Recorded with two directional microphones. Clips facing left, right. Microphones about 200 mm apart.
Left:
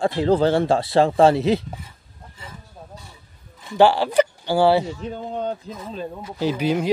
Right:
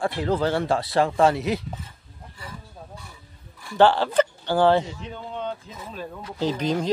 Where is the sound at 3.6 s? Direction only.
15° left (ahead or behind).